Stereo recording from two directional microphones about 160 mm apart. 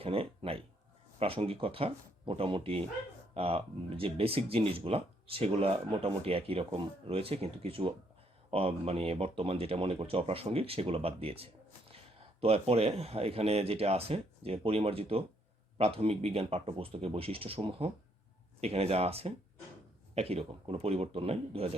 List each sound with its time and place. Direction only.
0.0 s speech: 35° right (ahead or behind)